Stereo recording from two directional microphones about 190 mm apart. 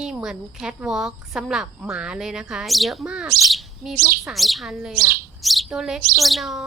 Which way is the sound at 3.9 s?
50° right (ahead or behind).